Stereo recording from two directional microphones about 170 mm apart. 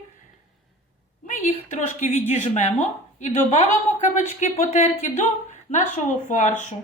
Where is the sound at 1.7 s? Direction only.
45° left (ahead or behind).